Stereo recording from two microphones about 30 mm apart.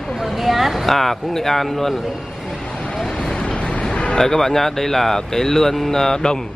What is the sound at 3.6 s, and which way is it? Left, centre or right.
Vehicle, left.